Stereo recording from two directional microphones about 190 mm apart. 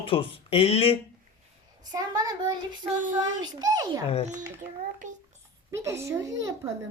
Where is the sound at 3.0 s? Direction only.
40° right (ahead or behind).